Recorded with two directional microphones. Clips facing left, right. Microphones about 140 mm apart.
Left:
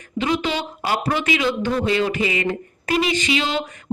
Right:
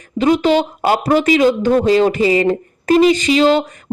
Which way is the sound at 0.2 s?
40° right (ahead or behind).